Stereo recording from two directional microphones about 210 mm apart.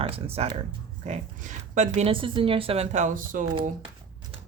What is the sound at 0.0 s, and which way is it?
Speech, 30° right (ahead or behind).